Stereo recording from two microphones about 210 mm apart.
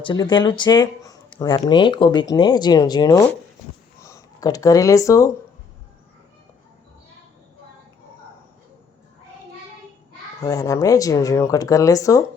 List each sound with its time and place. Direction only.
0.0 s speech: 20° left (ahead or behind)
10.4 s speech: 15° left (ahead or behind)